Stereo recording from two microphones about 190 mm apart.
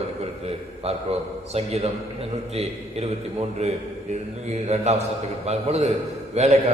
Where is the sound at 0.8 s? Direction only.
35° right (ahead or behind).